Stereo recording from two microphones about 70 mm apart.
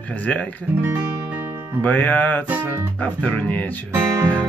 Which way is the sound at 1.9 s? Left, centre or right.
Left.